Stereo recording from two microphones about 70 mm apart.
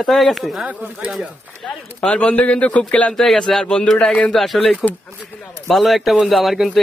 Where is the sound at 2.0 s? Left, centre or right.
Centre.